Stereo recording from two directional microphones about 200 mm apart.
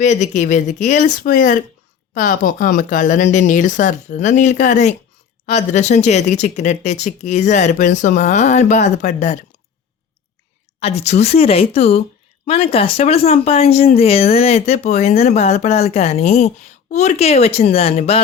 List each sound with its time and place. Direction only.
0.0 s speech: 35° left (ahead or behind)
10.8 s speech: 30° left (ahead or behind)